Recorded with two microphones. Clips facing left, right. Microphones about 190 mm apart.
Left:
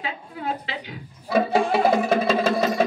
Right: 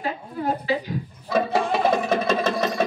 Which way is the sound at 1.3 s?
10° left (ahead or behind).